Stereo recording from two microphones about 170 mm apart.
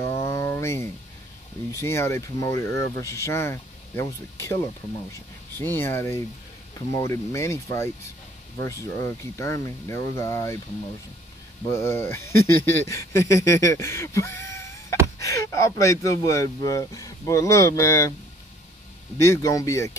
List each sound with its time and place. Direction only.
0.2 s a sound: 20° left (ahead or behind)
1.8 s speech: 15° left (ahead or behind)
11.6 s speech: 15° left (ahead or behind)
19.1 s speech: 15° left (ahead or behind)